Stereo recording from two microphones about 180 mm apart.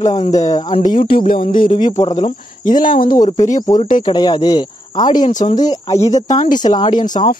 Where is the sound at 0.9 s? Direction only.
30° left (ahead or behind).